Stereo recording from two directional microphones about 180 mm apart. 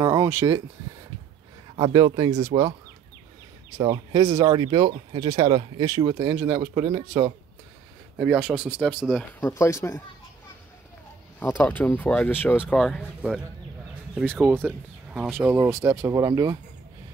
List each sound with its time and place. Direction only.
0.0 s a sound: 20° right (ahead or behind)
1.8 s speech: 20° right (ahead or behind)
3.7 s speech: 25° right (ahead or behind); by 9.2 s 5° right (ahead or behind)
9.4 s speech: 15° left (ahead or behind)
11.3 s speech: 10° left (ahead or behind)
14.3 s speech: 10° right (ahead or behind)